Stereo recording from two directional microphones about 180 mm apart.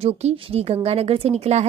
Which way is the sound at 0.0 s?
35° right (ahead or behind).